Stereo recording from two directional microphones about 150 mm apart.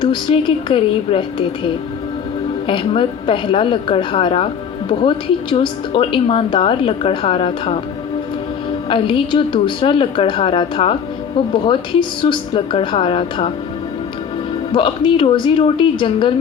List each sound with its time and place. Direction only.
0.0 s a woman's voice: 35° left (ahead or behind)
8.9 s a woman's voice: 35° left (ahead or behind)
14.7 s a woman's voice: 35° left (ahead or behind)